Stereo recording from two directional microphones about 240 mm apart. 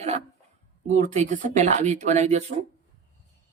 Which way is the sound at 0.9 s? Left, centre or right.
Right.